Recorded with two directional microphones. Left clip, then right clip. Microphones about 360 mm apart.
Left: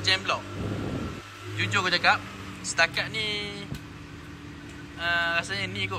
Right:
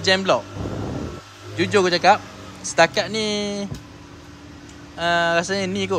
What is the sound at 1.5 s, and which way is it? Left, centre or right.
Speech, centre.